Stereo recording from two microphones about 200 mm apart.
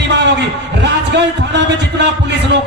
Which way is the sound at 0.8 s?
60° right (ahead or behind).